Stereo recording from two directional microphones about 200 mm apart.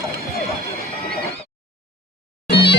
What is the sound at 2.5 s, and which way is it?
Music, 55° left (ahead or behind).